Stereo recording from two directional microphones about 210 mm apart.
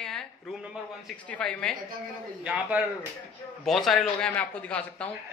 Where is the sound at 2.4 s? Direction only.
5° right (ahead or behind).